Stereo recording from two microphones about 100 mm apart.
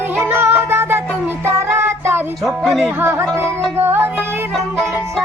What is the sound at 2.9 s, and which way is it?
Music, 25° right (ahead or behind).